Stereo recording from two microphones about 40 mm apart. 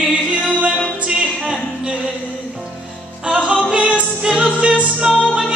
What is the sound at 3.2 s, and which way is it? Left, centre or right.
Music, right.